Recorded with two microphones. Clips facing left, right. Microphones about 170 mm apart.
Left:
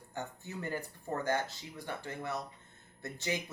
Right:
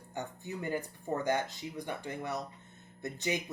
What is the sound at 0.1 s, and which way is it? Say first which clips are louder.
A woman's voice: right 2 dB; 15° right (ahead or behind).